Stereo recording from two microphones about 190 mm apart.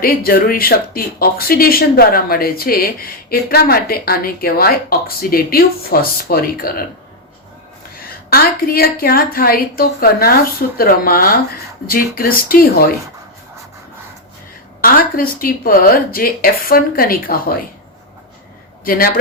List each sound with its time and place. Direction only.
0.0 s speech: 50° left (ahead or behind)
7.9 s speech: 50° left (ahead or behind)
14.8 s speech: 50° left (ahead or behind)
18.9 s speech: 50° left (ahead or behind)